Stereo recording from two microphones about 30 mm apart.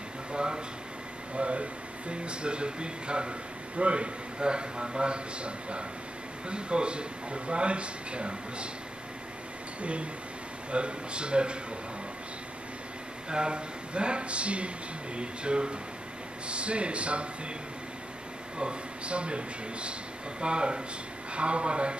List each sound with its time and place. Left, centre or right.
0.3 s a sound: right
1.3 s speech: right
9.8 s speech: right
13.3 s speech: right
18.6 s speech: right